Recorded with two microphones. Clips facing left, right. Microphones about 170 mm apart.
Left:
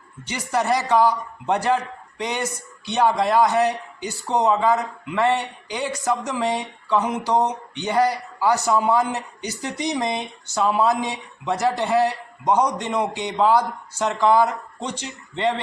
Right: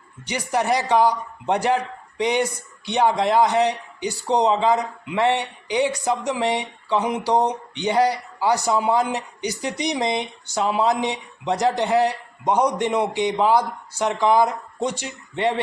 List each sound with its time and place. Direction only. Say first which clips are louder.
0.3 s a man's voice: even; 15° right (ahead or behind)